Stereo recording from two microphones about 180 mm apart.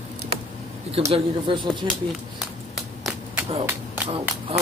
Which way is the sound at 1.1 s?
25° right (ahead or behind).